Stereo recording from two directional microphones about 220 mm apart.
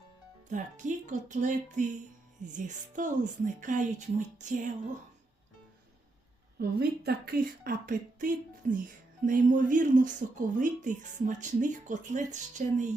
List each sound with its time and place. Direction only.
0.5 s speech: 35° right (ahead or behind)
6.6 s a woman's voice: 45° right (ahead or behind)